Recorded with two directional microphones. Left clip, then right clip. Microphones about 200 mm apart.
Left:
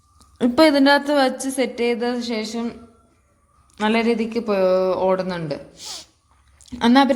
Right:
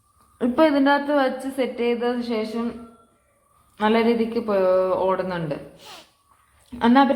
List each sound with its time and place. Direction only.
0.3 s a woman's voice: 45° left (ahead or behind)
3.8 s speech: 40° left (ahead or behind)